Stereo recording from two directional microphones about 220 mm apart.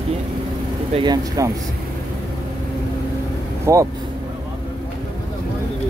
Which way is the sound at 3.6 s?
15° right (ahead or behind).